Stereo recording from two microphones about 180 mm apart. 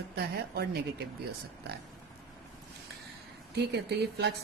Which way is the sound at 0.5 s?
60° right (ahead or behind).